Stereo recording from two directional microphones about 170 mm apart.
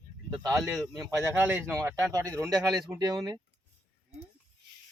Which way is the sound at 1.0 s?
15° right (ahead or behind).